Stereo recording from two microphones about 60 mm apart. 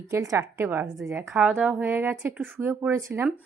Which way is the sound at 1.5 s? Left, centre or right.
Right.